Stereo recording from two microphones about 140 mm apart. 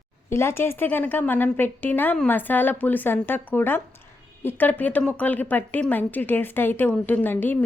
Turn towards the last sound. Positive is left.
turn(degrees=15)  # may be behind; listen again after turning